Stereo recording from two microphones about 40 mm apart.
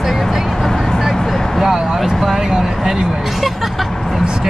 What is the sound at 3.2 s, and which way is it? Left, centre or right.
Vehicle, centre.